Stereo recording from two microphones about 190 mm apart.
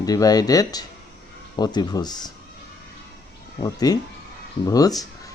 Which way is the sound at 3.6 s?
20° left (ahead or behind).